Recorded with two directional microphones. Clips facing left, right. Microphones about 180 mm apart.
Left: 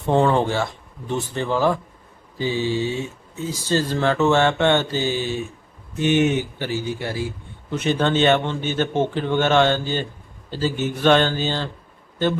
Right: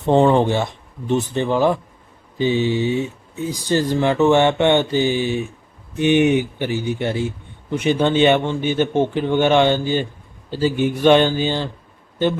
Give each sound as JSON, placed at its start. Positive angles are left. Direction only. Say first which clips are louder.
{"t": 0.0, "sound": "speech", "louder": "right 4 dB", "side_deg": -20}